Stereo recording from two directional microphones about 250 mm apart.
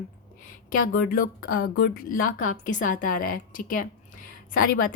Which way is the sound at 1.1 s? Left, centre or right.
Left.